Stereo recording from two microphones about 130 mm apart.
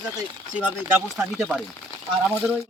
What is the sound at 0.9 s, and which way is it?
Speech, 5° right (ahead or behind).